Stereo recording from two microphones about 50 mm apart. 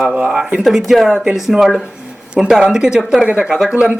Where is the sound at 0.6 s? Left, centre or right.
Centre.